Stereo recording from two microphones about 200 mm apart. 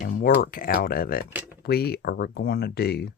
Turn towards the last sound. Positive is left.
turn(degrees=55)  # may be behind; listen again after turning